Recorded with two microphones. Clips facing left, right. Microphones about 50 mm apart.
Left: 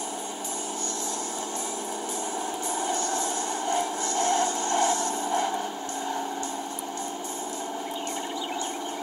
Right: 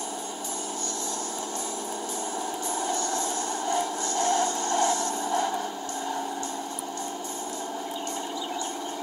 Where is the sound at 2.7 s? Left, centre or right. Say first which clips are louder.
Even; left.